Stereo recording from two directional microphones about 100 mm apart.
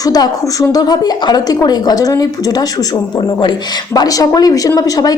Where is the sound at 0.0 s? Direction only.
40° left (ahead or behind).